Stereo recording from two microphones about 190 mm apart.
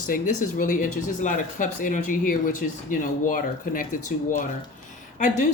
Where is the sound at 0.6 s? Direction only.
45° left (ahead or behind).